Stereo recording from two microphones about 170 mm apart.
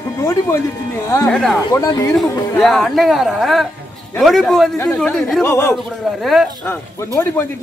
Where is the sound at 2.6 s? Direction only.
Centre (ahead or behind).